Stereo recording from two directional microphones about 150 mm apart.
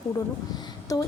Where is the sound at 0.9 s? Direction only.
25° left (ahead or behind).